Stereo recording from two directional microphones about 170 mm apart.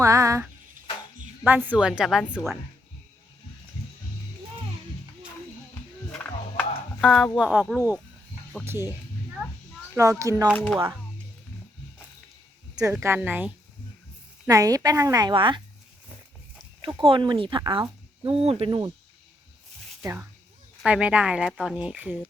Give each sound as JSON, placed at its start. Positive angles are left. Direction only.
{"t": 0.0, "sound": "a sound", "side_deg": -20}
{"t": 1.5, "sound": "speech", "side_deg": -10}
{"t": 6.1, "sound": "music", "side_deg": 5}
{"t": 7.3, "sound": "speech", "side_deg": -5}
{"t": 9.9, "sound": "a woman's voice", "side_deg": -20}
{"t": 12.7, "sound": "speech", "side_deg": -15}
{"t": 14.4, "sound": "a woman's voice", "side_deg": -20}
{"t": 16.8, "sound": "a woman's voice", "side_deg": -30}
{"t": 18.2, "sound": "cricket", "side_deg": -30}
{"t": 20.0, "sound": "speech", "side_deg": -20}